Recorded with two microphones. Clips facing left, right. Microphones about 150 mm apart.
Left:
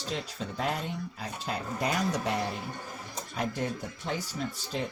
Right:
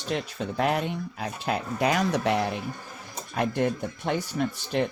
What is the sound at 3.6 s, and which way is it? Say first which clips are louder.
Speech: right 7 dB; 65° right (ahead or behind).